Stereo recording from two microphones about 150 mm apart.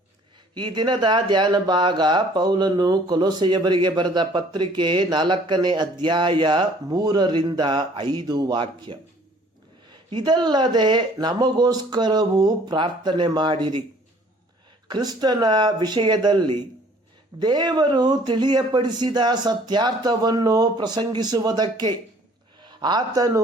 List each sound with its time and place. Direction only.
0.5 s speech: 30° right (ahead or behind)
10.1 s speech: 30° right (ahead or behind)
14.8 s speech: 30° right (ahead or behind)